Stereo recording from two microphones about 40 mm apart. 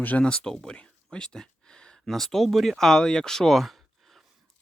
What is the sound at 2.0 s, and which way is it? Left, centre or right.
Speech, centre.